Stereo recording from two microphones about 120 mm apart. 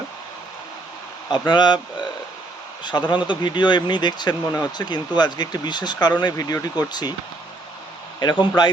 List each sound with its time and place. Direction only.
1.3 s speech: 40° left (ahead or behind)
3.1 s speech: 40° left (ahead or behind)
8.2 s speech: 35° left (ahead or behind)